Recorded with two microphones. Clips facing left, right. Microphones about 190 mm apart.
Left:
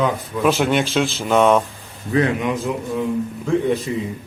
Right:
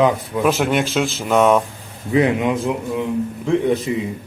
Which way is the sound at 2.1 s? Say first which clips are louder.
Right 2 dB; 15° right (ahead or behind).